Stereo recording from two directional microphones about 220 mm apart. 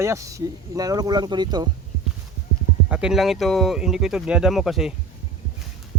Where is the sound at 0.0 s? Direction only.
15° right (ahead or behind).